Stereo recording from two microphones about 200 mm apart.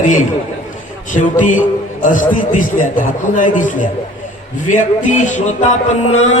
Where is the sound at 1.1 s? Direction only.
40° left (ahead or behind).